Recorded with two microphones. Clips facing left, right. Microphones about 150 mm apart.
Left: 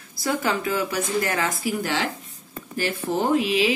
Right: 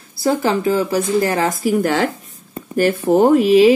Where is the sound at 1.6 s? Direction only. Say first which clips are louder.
Right 9 dB; 50° right (ahead or behind).